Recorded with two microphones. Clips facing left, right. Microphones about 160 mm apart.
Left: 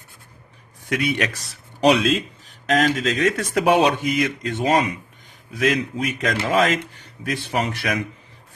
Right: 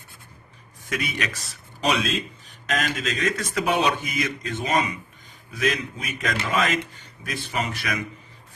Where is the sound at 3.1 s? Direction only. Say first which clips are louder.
Left 5 dB; 65° left (ahead or behind).